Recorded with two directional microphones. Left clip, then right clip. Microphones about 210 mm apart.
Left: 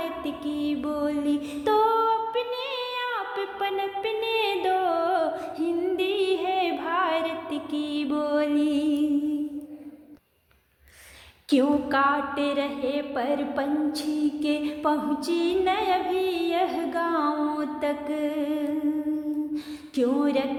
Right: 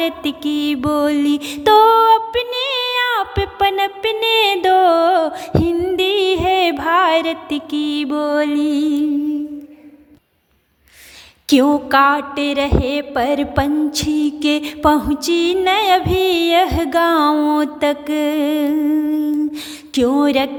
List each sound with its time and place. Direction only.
0.0 s music: 35° right (ahead or behind)
11.4 s music: 30° right (ahead or behind)